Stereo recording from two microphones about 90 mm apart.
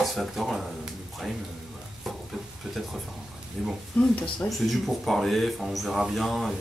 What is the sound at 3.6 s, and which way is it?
Speech, 5° left (ahead or behind).